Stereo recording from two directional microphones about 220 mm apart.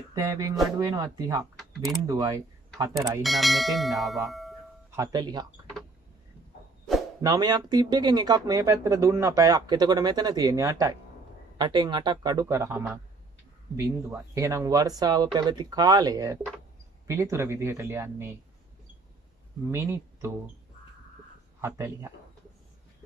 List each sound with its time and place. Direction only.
0.1 s speech: 15° right (ahead or behind)
3.2 s speech: centre (ahead or behind)
4.9 s speech: 15° right (ahead or behind)
7.2 s speech: 15° right (ahead or behind)
19.7 s speech: 10° right (ahead or behind)
21.5 s speech: 15° right (ahead or behind)